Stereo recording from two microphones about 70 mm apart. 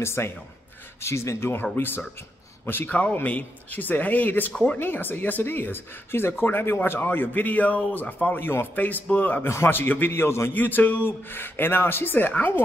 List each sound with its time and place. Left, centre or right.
0.0 s speech: left
10.5 s speech: left